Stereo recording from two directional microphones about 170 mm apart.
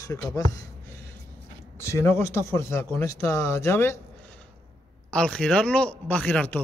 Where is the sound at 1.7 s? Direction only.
15° left (ahead or behind).